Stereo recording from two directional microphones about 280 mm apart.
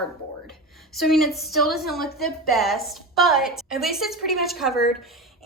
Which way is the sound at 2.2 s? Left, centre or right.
Centre.